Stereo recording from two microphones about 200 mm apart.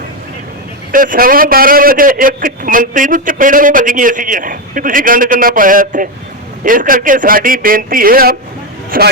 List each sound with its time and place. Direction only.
0.9 s a man's voice: 45° right (ahead or behind)